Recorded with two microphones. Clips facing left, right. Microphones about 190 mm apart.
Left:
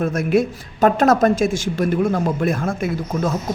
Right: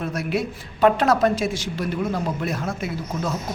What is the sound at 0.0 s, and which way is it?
A man's voice, 50° left (ahead or behind).